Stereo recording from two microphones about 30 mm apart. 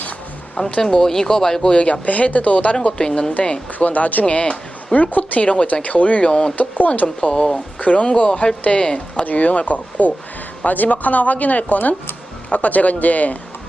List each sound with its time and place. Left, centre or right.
0.8 s speech: left
1.7 s speech: left
2.0 s speech: left
3.0 s speech: left
3.8 s speech: left
4.3 s speech: left
4.9 s speech: left
6.2 s speech: left
6.6 s speech: left
7.2 s speech: left
7.5 s speech: left
8.8 s speech: left
9.2 s speech: left
12.5 s speech: left